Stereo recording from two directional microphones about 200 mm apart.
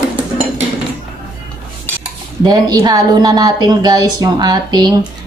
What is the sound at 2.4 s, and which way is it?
Speech, 20° right (ahead or behind).